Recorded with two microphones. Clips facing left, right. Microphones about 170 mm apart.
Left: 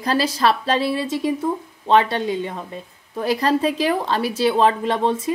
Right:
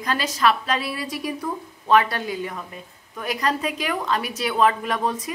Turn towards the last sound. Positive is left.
turn(degrees=25)  # may be behind; listen again after turning